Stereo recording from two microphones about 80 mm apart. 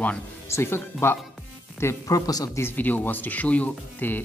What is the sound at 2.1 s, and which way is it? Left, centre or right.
Speech, left.